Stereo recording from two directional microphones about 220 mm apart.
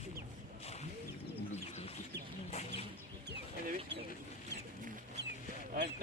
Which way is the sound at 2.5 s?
30° left (ahead or behind).